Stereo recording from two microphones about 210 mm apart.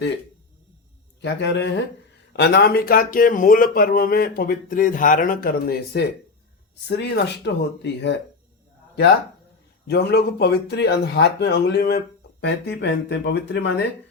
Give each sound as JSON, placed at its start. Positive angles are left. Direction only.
{"t": 1.2, "sound": "speech", "side_deg": 55}
{"t": 9.8, "sound": "speech", "side_deg": 50}